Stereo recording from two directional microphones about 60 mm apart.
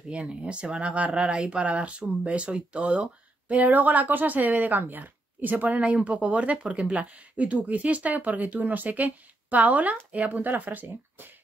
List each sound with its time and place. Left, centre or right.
0.1 s speech: centre